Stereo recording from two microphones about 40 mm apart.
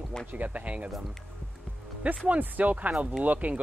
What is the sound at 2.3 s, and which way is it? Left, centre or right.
Speech, right.